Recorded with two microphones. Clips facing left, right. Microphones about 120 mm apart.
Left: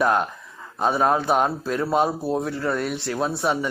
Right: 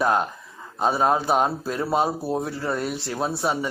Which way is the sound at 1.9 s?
5° right (ahead or behind).